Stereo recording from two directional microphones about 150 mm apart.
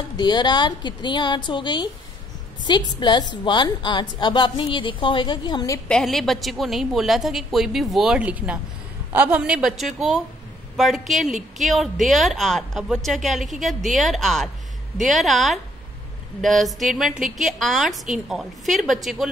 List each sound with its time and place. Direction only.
0.2 s a woman's voice: 30° left (ahead or behind)
5.9 s a woman's voice: 5° left (ahead or behind)